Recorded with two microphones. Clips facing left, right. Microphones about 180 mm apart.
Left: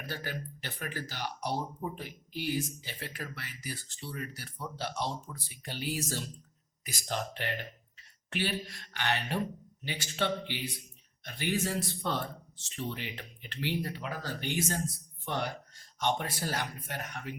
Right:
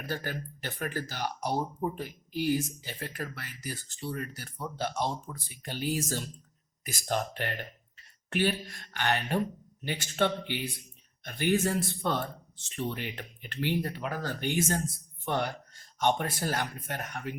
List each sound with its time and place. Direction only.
0.0 s speech: 45° right (ahead or behind)
16.0 s speech: 50° right (ahead or behind)